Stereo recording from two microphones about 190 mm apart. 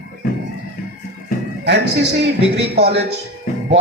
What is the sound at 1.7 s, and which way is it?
Speech, 60° right (ahead or behind).